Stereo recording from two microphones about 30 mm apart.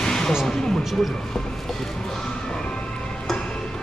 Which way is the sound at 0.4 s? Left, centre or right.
Centre.